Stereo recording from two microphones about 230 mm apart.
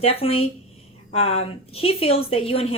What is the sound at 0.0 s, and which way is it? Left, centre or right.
Speech, left.